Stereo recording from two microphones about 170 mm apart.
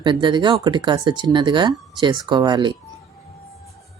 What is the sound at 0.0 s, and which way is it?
Speech, 30° right (ahead or behind).